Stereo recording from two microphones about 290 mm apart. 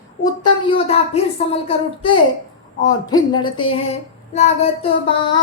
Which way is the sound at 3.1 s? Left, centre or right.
Centre.